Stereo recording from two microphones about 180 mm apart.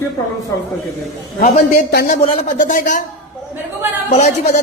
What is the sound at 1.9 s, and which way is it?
Speech, 60° left (ahead or behind).